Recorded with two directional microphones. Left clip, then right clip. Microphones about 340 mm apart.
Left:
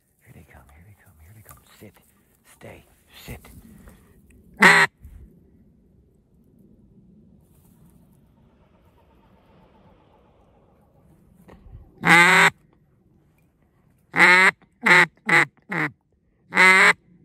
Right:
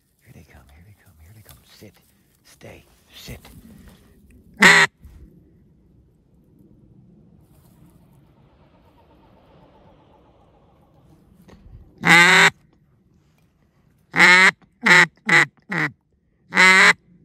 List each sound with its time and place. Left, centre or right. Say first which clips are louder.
0.3 s a sound: even; centre
8.4 s vehicle: right 3 dB; right
11.4 s duck: left 2 dB; centre
14.1 s quack: right 2 dB; centre
16.4 s duck: right 2 dB; centre